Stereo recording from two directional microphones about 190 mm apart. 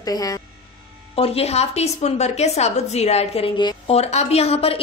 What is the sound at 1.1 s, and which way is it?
A woman's voice, 30° left (ahead or behind).